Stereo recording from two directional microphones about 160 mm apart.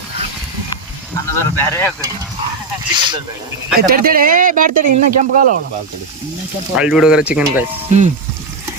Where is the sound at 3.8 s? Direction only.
65° right (ahead or behind).